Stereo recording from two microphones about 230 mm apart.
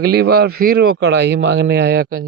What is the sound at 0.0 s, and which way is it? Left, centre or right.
A man's voice, right.